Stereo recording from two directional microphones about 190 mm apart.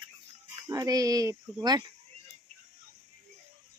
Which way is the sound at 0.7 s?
20° right (ahead or behind).